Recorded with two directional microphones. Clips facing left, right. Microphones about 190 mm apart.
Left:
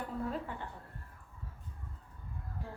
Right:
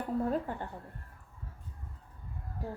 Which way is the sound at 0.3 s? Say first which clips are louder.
Right 6 dB; 45° right (ahead or behind).